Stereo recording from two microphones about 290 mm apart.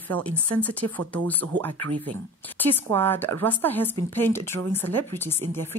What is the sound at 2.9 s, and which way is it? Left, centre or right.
Speech, centre.